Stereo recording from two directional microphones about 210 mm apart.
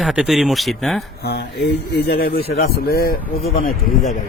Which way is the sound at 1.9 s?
50° left (ahead or behind).